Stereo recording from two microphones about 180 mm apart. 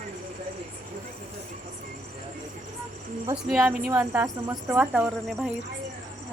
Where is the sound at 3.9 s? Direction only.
15° right (ahead or behind).